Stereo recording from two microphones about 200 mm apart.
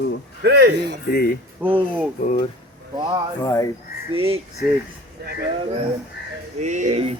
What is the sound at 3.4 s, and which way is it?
Speech, 15° left (ahead or behind).